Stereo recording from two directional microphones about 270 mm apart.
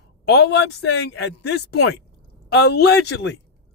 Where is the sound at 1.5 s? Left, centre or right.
Left.